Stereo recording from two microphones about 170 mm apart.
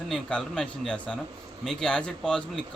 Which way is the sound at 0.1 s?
5° left (ahead or behind).